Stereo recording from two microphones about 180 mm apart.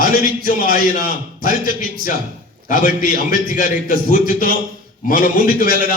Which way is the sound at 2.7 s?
50° left (ahead or behind).